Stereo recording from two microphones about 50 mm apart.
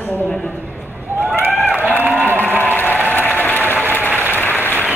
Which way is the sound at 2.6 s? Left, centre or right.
Left.